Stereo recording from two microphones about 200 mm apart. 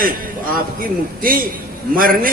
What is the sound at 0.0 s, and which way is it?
A man's voice, 45° right (ahead or behind).